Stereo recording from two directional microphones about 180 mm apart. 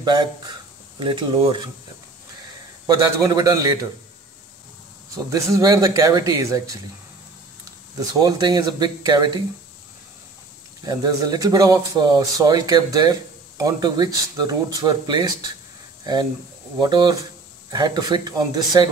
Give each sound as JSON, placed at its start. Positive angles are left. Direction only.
{"t": 0.0, "sound": "speech", "side_deg": -25}
{"t": 2.9, "sound": "speech", "side_deg": -20}
{"t": 5.1, "sound": "speech", "side_deg": -20}
{"t": 8.1, "sound": "speech", "side_deg": -20}
{"t": 10.8, "sound": "speech", "side_deg": -20}